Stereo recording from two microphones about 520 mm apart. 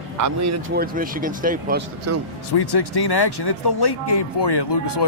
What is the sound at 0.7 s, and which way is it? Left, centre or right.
Speech, centre.